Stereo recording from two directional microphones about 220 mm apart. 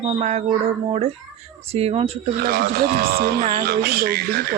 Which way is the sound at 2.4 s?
45° right (ahead or behind).